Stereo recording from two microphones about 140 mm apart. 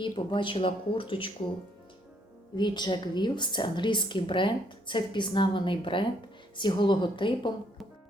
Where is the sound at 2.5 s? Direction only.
30° left (ahead or behind).